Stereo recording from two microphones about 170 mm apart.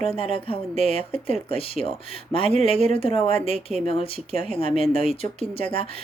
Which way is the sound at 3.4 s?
40° right (ahead or behind).